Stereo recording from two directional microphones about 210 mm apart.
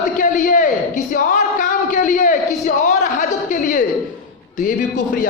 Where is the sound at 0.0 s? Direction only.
35° left (ahead or behind).